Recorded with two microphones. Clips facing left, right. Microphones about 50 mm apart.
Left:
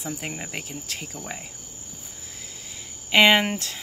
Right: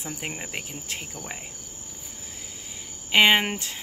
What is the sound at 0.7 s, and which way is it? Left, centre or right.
Speech, right.